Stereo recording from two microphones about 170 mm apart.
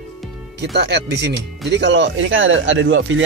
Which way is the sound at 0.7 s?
80° right.